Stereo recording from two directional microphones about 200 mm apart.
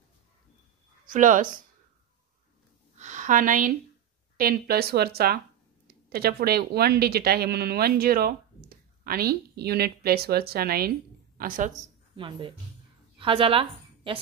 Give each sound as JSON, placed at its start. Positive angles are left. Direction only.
{"t": 1.0, "sound": "speech", "side_deg": -40}
{"t": 3.0, "sound": "a sound", "side_deg": -40}
{"t": 4.4, "sound": "a woman's voice", "side_deg": -50}
{"t": 11.7, "sound": "a woman's voice", "side_deg": -25}